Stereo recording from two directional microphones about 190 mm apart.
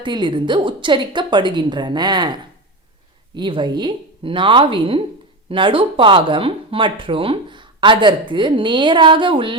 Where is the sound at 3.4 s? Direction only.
25° right (ahead or behind).